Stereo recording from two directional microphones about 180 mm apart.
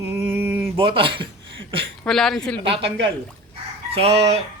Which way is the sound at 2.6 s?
30° right (ahead or behind).